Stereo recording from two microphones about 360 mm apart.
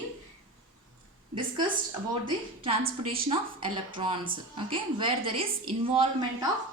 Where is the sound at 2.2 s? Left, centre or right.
Centre.